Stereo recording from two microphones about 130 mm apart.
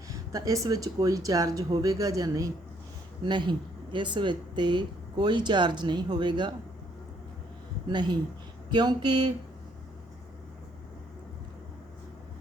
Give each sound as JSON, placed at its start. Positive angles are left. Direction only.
{"t": 0.1, "sound": "speech", "side_deg": -25}
{"t": 7.9, "sound": "speech", "side_deg": -35}